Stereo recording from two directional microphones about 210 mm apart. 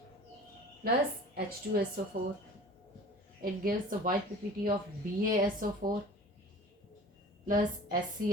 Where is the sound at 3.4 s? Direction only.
45° right (ahead or behind).